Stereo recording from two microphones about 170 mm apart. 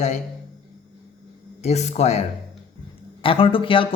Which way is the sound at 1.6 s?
40° left (ahead or behind).